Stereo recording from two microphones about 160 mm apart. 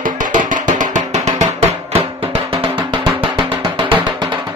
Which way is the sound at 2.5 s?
35° right (ahead or behind).